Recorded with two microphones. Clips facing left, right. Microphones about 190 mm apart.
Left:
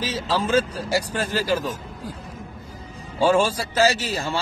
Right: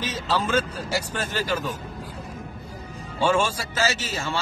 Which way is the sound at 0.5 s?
35° left (ahead or behind).